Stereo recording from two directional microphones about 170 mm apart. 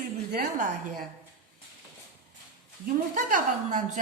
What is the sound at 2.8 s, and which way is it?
A woman's voice, 50° right (ahead or behind).